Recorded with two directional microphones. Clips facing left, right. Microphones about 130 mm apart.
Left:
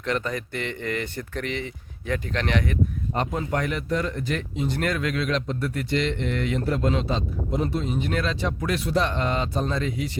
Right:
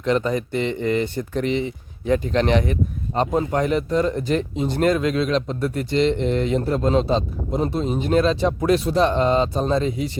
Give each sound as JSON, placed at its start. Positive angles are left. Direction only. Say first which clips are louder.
{"t": 0.0, "sound": "speech", "louder": "right 7 dB", "side_deg": -20}